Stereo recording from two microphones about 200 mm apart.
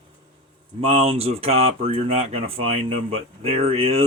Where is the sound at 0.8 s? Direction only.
30° right (ahead or behind).